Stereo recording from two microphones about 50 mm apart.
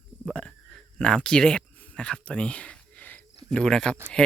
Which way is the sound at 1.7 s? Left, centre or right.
Left.